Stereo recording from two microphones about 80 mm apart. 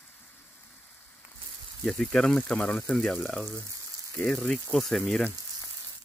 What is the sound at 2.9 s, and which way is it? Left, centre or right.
Speech, centre.